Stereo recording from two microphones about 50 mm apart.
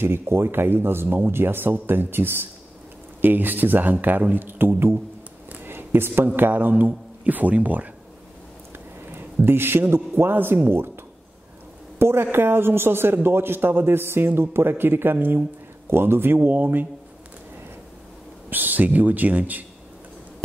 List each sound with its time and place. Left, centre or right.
0.0 s a man's voice: right
9.1 s a man's voice: right
12.0 s a man's voice: right
16.3 s speech: right
18.5 s speech: right